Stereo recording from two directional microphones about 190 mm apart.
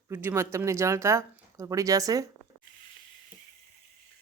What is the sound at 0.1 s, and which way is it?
Speech, 15° right (ahead or behind).